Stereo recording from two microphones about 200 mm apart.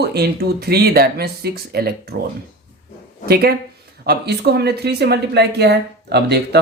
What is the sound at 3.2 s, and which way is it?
Speech, 50° right (ahead or behind).